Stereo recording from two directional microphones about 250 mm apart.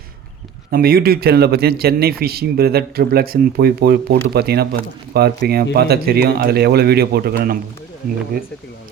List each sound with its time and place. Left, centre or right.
0.7 s speech: right